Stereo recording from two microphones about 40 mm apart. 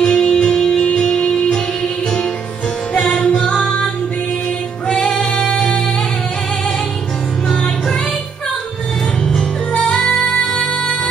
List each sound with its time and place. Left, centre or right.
0.0 s music: centre
2.9 s music: centre
4.8 s female singing: left
7.4 s music: left
9.2 s music: centre
9.7 s music: left